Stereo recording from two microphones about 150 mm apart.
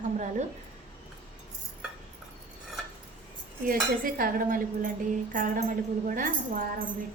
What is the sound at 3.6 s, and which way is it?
Cutlery, 70° right (ahead or behind).